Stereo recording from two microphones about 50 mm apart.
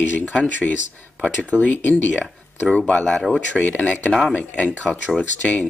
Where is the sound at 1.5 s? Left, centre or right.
Left.